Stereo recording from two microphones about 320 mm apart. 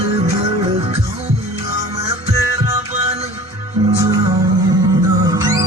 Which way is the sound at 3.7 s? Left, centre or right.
Centre.